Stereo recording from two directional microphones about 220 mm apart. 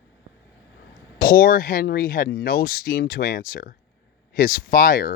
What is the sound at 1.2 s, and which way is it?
Speech, 40° left (ahead or behind).